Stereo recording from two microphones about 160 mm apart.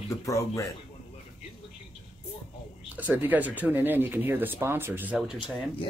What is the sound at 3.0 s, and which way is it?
Speech, 10° right (ahead or behind).